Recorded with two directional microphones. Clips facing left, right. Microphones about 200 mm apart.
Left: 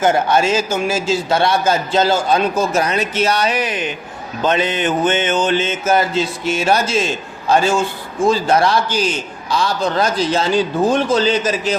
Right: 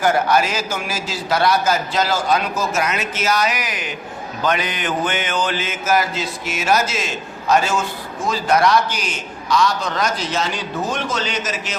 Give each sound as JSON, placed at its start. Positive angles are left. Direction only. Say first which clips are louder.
{"t": 0.0, "sound": "mantra", "louder": "left 2 dB", "side_deg": 25}